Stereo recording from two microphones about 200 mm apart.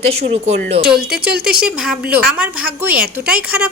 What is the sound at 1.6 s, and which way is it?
Speech, 5° right (ahead or behind).